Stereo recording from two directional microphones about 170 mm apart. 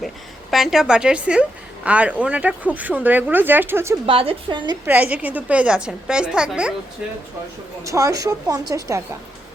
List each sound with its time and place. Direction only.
0.5 s a woman's voice: centre (ahead or behind)
4.0 s a woman's voice: 35° right (ahead or behind)
4.9 s a woman's voice: 10° right (ahead or behind)
7.9 s a woman's voice: 20° right (ahead or behind)